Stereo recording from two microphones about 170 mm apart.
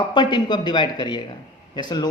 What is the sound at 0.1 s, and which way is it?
A man's voice, 25° left (ahead or behind).